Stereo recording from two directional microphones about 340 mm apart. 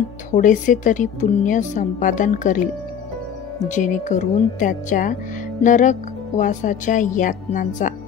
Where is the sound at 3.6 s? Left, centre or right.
Left.